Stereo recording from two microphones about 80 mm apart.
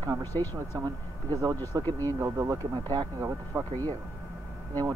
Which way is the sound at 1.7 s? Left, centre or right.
Right.